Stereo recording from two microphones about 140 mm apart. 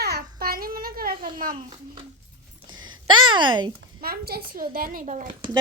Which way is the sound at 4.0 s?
90° right.